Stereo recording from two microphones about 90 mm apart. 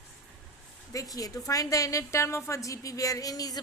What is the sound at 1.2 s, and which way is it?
A woman's voice, 40° left (ahead or behind).